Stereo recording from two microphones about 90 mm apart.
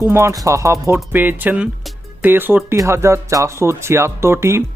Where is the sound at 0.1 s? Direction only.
30° right (ahead or behind).